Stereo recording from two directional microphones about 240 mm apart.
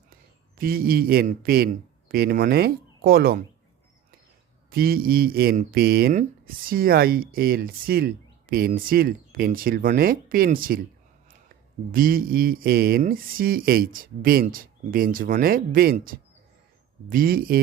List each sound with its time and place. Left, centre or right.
0.6 s speech: right
4.7 s speech: right
11.9 s speech: right